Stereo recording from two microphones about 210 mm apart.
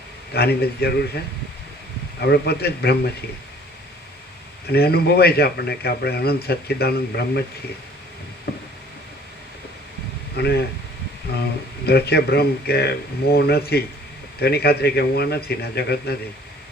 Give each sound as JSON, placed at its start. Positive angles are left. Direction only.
{"t": 0.3, "sound": "a man's voice", "side_deg": 50}
{"t": 2.2, "sound": "a man's voice", "side_deg": 50}
{"t": 4.7, "sound": "a man's voice", "side_deg": 50}
{"t": 8.5, "sound": "a sound", "side_deg": 50}
{"t": 10.3, "sound": "speech", "side_deg": 50}
{"t": 11.9, "sound": "a man's voice", "side_deg": 50}